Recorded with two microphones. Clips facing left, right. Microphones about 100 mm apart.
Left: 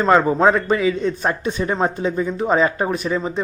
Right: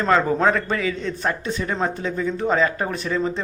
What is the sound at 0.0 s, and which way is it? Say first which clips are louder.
A man's voice: left 4 dB; 20° left (ahead or behind).